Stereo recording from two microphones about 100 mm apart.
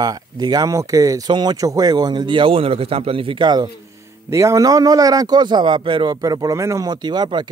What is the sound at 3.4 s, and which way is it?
Speech, 45° right (ahead or behind).